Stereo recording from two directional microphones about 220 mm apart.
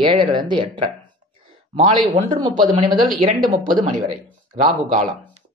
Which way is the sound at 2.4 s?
20° right (ahead or behind).